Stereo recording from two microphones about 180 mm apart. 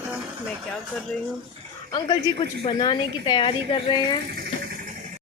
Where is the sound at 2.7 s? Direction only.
25° left (ahead or behind).